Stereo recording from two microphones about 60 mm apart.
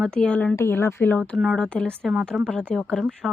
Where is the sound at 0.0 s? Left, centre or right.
Centre.